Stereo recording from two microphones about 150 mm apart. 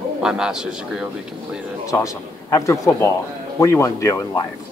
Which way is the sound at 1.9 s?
20° left (ahead or behind).